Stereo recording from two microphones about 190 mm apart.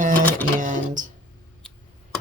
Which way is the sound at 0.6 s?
45° right (ahead or behind).